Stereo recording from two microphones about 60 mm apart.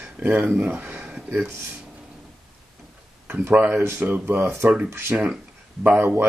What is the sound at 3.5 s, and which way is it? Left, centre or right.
Speech, right.